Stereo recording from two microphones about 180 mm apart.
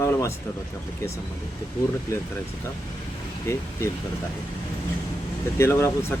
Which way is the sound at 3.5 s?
15° left (ahead or behind).